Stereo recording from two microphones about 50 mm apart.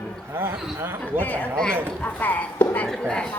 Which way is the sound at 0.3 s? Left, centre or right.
Right.